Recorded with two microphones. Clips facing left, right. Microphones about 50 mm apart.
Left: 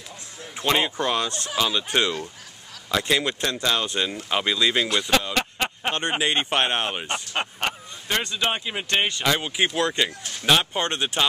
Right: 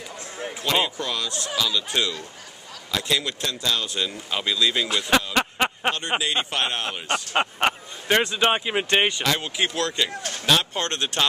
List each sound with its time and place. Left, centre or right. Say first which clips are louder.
0.9 s speech: left 4 dB; left
5.3 s a sound: right 3 dB; centre
6.2 s speech: left 3 dB; left
7.3 s speech: right 6 dB; centre
9.2 s speech: left 1 dB; centre